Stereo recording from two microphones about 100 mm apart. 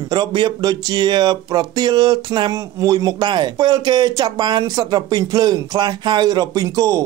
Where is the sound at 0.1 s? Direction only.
45° right (ahead or behind).